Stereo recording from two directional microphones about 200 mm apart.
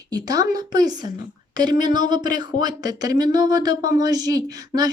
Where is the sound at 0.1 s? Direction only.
20° right (ahead or behind).